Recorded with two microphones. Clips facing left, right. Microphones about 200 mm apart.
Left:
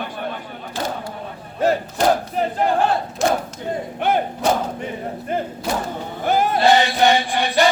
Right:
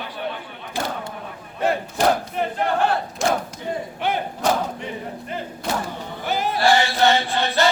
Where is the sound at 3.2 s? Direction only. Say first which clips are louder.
Left 2 dB; centre (ahead or behind).